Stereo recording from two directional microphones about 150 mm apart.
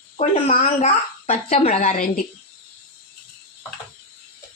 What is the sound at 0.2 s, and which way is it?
A woman's voice, 45° left (ahead or behind).